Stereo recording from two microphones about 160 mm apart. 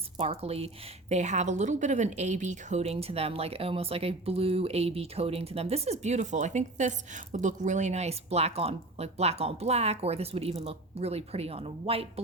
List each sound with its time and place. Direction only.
0.2 s a woman's voice: 40° right (ahead or behind)